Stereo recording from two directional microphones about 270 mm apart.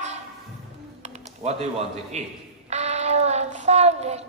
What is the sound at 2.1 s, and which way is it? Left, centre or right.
Speech, right.